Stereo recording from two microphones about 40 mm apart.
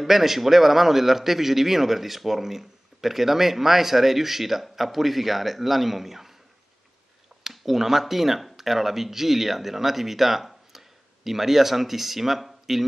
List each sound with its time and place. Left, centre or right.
0.0 s a man's voice: centre
7.4 s speech: centre